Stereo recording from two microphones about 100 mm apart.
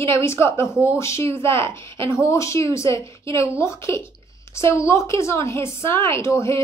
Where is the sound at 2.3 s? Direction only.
30° left (ahead or behind).